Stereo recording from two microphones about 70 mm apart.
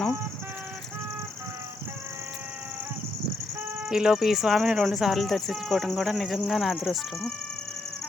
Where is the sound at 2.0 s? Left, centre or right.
Right.